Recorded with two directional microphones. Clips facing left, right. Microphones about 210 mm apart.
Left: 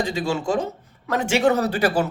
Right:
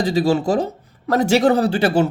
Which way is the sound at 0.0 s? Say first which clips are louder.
Right 6 dB; 35° right (ahead or behind).